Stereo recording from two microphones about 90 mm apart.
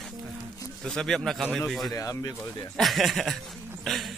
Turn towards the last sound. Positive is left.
turn(degrees=0)  # may be behind; listen again after turning